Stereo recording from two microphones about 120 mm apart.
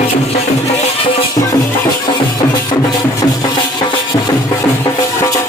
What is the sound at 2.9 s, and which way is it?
Music, 35° left (ahead or behind).